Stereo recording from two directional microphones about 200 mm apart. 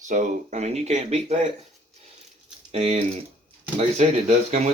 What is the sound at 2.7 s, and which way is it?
Speech, 30° right (ahead or behind).